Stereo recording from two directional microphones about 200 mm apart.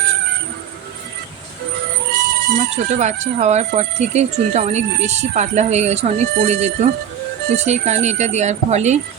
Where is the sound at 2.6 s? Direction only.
35° right (ahead or behind).